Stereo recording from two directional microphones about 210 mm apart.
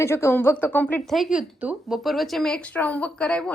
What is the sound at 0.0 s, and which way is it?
A woman's voice, 10° left (ahead or behind).